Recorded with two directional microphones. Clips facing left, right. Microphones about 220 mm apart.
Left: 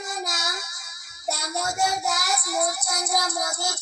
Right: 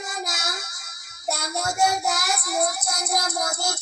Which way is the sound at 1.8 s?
50° right (ahead or behind).